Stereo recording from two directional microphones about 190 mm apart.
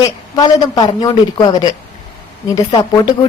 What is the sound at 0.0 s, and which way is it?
A woman's voice, 20° left (ahead or behind).